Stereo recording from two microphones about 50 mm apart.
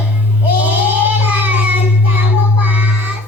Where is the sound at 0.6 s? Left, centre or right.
Right.